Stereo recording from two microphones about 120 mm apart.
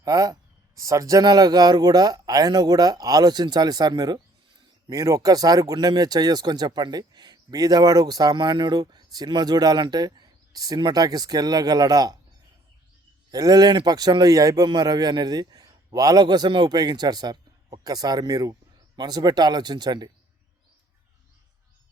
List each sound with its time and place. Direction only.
0.0 s speech: 30° right (ahead or behind)
13.3 s speech: 35° right (ahead or behind)